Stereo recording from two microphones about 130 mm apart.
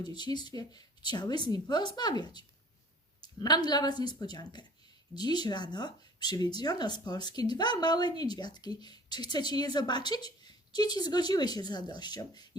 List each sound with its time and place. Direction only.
0.0 s speech: 35° left (ahead or behind)